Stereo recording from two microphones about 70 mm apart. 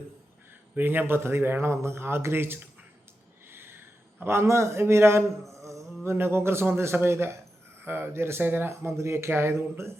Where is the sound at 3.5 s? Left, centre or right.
Right.